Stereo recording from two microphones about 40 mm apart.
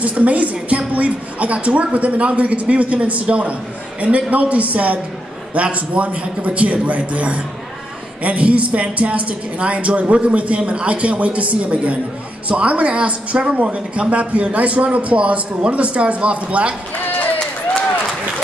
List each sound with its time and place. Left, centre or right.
0.0 s a woman's voice: right